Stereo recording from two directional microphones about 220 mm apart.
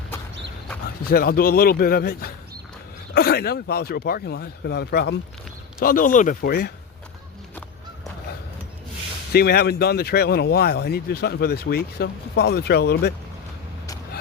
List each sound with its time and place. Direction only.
1.0 s speech: 45° left (ahead or behind)
9.3 s speech: 45° left (ahead or behind)